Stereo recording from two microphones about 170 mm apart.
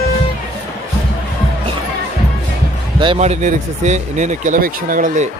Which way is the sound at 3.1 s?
40° right (ahead or behind).